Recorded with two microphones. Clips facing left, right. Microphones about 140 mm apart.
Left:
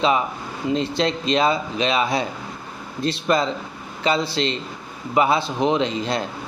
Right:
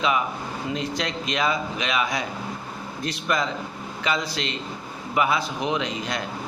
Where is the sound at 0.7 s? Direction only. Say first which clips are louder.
Left 8 dB; 30° left (ahead or behind).